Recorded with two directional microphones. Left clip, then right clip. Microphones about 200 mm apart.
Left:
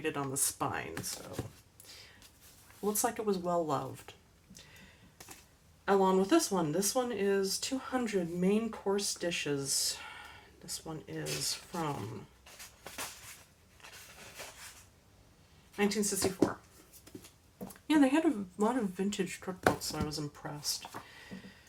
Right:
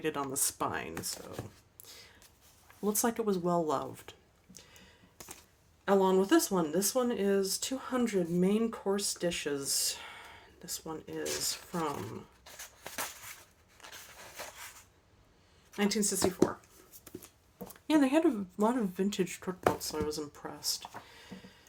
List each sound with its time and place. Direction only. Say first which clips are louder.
0.0 s speech: right 1 dB; 40° right (ahead or behind)
0.9 s speech: right 1 dB; 20° right (ahead or behind)
2.8 s speech: right 1 dB; 45° right (ahead or behind)
5.8 s speech: right 1 dB; 45° right (ahead or behind)
15.7 s speech: even; 45° right (ahead or behind)
17.8 s speech: right 1 dB; 40° right (ahead or behind)